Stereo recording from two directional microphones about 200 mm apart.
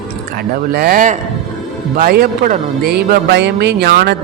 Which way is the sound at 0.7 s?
50° right (ahead or behind).